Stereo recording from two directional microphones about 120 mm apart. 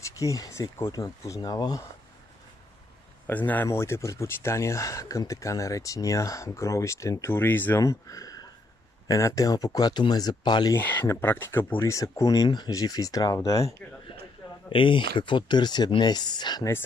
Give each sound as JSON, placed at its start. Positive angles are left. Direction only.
{"t": 0.2, "sound": "speech", "side_deg": 25}
{"t": 3.3, "sound": "speech", "side_deg": 15}
{"t": 10.8, "sound": "speech", "side_deg": 15}
{"t": 14.7, "sound": "speech", "side_deg": 45}